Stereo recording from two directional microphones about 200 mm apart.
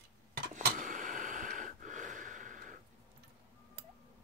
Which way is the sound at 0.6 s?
45° right (ahead or behind).